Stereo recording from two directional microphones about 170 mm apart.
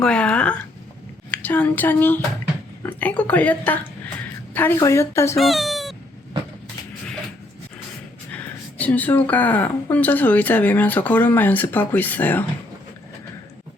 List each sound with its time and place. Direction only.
0.0 s a sound: 5° left (ahead or behind)
1.3 s a woman's voice: 10° left (ahead or behind)
5.4 s speech: centre (ahead or behind)
8.8 s a woman's voice: 10° left (ahead or behind)